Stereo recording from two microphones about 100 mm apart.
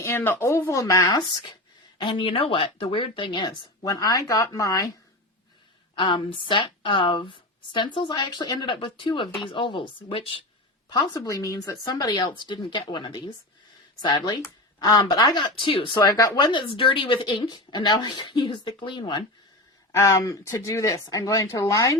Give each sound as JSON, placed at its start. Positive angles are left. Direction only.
{"t": 0.0, "sound": "speech", "side_deg": 25}
{"t": 1.3, "sound": "speech", "side_deg": 50}
{"t": 6.0, "sound": "speech", "side_deg": 55}
{"t": 10.8, "sound": "speech", "side_deg": 45}
{"t": 16.0, "sound": "speech", "side_deg": 35}
{"t": 16.5, "sound": "speech", "side_deg": 60}
{"t": 19.9, "sound": "speech", "side_deg": 30}